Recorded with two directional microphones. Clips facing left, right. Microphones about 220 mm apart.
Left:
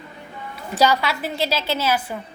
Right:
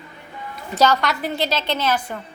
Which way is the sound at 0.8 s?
10° left (ahead or behind).